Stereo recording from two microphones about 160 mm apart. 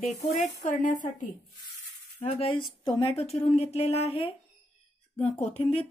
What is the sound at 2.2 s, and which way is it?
Speech, 40° left (ahead or behind).